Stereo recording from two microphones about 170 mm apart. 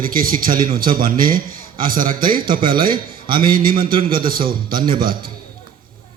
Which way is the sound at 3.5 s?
55° right (ahead or behind).